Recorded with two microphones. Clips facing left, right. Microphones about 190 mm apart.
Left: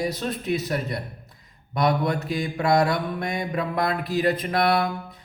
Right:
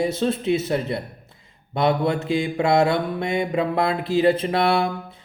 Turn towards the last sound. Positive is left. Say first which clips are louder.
# right 2 dB
turn(degrees=-25)  # may be behind; listen again after turning